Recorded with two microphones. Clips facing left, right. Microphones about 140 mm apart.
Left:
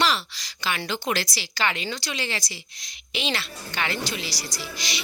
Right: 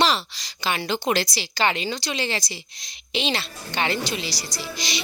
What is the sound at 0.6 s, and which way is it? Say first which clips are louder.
Speech: right 3 dB; 25° right (ahead or behind).